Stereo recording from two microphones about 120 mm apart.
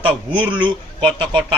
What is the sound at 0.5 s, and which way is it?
Speech, 40° right (ahead or behind).